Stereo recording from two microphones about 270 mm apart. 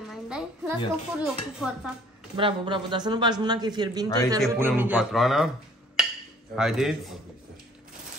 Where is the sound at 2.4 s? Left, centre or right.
Centre.